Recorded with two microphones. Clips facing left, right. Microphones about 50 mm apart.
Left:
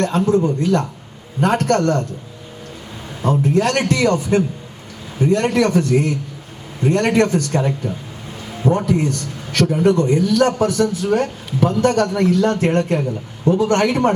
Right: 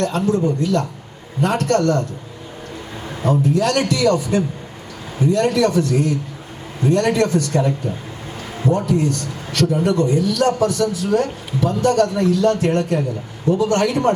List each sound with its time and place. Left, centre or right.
0.0 s a man's voice: left
3.2 s a man's voice: left
8.6 s a man's voice: left